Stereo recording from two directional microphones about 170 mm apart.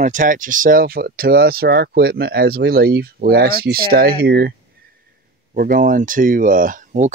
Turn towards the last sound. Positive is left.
turn(degrees=-45)  # may be behind; listen again after turning